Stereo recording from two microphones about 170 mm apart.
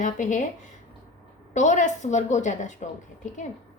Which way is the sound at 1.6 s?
45° left (ahead or behind).